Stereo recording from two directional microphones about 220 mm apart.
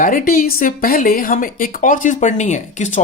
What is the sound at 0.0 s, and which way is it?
Speech, 40° left (ahead or behind).